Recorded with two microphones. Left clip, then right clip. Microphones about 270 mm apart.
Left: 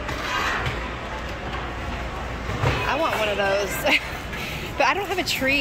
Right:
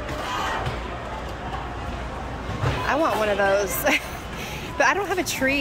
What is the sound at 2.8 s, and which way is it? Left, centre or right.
Speech, centre.